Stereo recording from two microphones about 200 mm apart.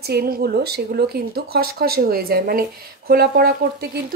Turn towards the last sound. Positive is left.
turn(degrees=-50)  # may be behind; listen again after turning